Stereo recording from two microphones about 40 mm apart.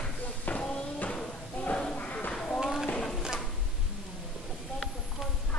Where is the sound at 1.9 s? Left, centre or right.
Left.